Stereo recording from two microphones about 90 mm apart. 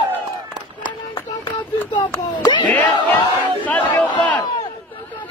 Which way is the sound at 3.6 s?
20° left (ahead or behind).